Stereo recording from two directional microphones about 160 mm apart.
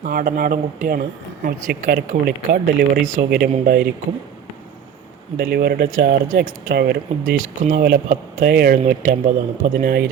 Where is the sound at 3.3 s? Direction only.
70° right (ahead or behind).